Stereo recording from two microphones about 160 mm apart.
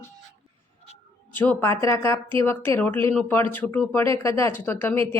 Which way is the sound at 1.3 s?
10° left (ahead or behind).